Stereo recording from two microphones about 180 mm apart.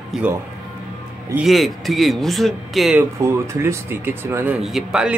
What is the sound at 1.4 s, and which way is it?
Speech, centre (ahead or behind).